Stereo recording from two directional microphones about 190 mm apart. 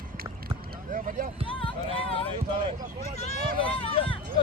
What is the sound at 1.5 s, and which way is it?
Run, 30° left (ahead or behind).